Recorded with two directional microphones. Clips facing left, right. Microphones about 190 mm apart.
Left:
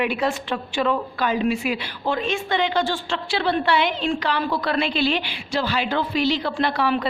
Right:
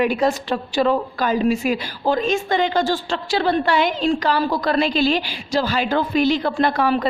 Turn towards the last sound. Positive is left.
turn(degrees=-45)  # may be behind; listen again after turning